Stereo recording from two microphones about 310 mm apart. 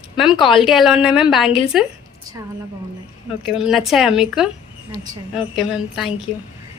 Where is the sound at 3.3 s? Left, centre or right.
Centre.